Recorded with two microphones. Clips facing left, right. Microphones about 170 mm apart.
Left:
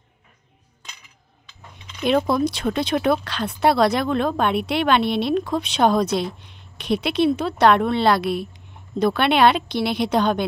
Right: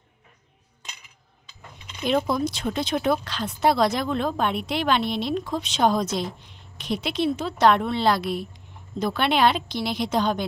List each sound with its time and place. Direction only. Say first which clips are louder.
2.0 s speech: left 4 dB; 65° left (ahead or behind)